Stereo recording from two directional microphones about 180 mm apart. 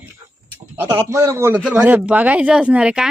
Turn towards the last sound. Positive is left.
turn(degrees=-5)  # may be behind; listen again after turning